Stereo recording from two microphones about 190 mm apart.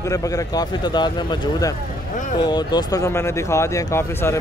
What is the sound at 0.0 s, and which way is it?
A man's voice, 15° left (ahead or behind).